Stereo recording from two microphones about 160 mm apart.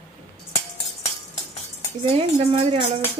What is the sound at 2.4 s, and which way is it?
Speech, 35° right (ahead or behind).